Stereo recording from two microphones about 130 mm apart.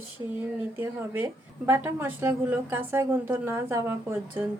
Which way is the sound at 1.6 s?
15° right (ahead or behind).